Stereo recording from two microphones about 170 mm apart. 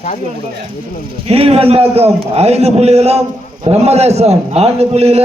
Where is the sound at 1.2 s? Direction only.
35° right (ahead or behind).